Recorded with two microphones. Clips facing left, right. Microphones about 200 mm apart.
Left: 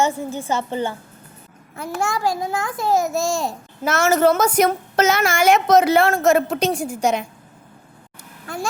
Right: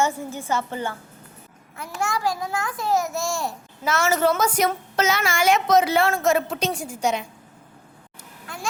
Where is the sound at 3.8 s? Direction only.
45° left (ahead or behind).